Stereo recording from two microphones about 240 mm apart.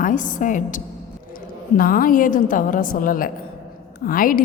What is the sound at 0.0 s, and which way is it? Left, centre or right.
A woman's voice, left.